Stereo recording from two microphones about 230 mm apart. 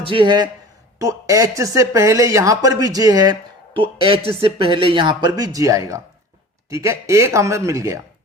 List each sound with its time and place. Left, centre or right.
0.1 s speech: right